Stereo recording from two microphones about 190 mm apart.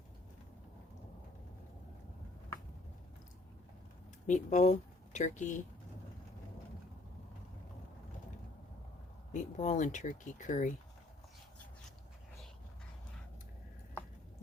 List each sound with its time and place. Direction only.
4.3 s speech: 40° left (ahead or behind)
9.3 s speech: 40° left (ahead or behind)